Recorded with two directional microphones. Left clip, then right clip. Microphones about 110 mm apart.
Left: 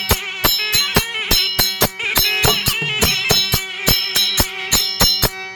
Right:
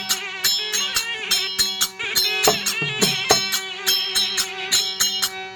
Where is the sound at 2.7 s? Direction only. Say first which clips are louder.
Left 4 dB; centre (ahead or behind).